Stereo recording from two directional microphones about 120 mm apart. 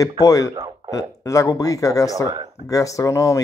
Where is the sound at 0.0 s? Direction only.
30° left (ahead or behind).